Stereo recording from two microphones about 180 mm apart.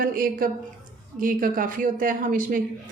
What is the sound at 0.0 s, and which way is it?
Speech, 55° right (ahead or behind).